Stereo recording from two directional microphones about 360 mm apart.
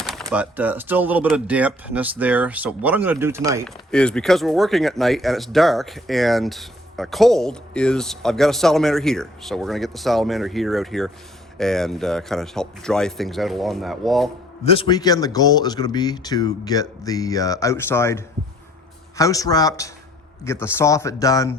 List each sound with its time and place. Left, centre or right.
0.0 s speech: centre
14.6 s speech: centre